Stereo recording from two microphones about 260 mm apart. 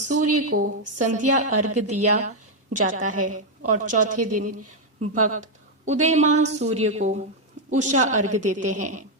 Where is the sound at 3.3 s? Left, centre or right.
Right.